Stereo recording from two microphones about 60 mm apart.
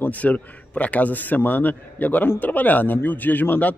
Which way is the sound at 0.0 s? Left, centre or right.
Left.